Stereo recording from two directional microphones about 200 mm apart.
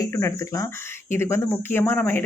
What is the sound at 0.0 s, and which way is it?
Speech, 15° left (ahead or behind).